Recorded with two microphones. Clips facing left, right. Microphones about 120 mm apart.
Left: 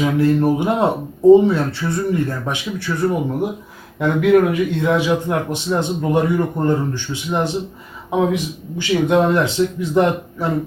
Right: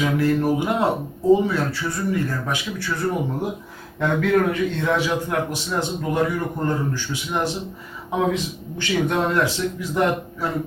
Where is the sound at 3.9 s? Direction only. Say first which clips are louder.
Left 5 dB; 15° left (ahead or behind).